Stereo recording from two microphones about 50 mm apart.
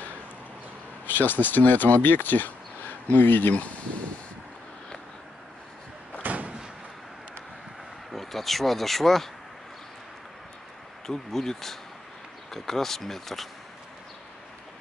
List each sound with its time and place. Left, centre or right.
1.0 s speech: left
6.2 s door: right
8.1 s speech: centre
11.1 s speech: centre